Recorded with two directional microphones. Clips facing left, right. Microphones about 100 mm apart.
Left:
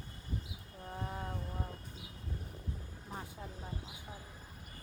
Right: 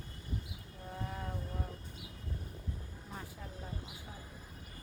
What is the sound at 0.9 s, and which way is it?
Vehicle, 25° left (ahead or behind).